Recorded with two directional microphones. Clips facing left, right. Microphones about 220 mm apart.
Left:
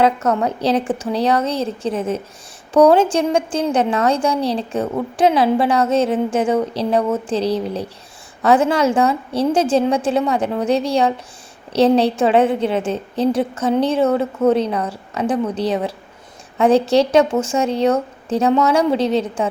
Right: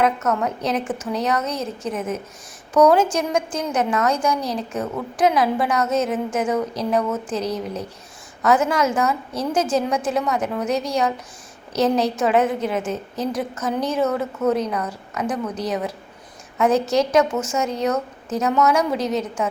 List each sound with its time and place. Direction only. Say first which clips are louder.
0.0 s a woman's voice: left 4 dB; 30° left (ahead or behind)